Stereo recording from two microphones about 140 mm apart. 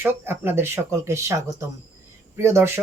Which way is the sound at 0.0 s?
15° right (ahead or behind).